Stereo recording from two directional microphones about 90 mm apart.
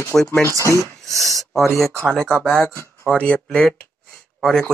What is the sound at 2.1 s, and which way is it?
Speech, 5° left (ahead or behind).